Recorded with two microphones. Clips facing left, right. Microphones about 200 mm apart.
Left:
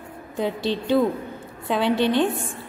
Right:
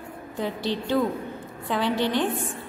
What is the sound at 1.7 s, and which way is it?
Speech, 15° left (ahead or behind).